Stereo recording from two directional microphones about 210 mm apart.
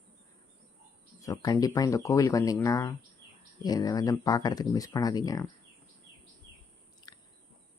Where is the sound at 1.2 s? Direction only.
15° left (ahead or behind).